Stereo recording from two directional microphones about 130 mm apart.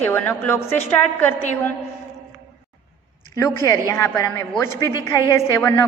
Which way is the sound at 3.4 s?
20° left (ahead or behind).